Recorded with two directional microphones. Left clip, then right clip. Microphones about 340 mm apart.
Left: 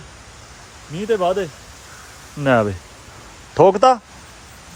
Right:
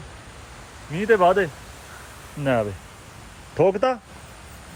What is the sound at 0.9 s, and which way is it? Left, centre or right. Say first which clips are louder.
Speech: right 2 dB; centre.